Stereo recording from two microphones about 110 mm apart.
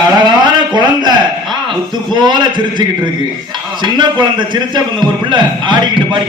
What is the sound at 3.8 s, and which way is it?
A man's voice, 45° right (ahead or behind).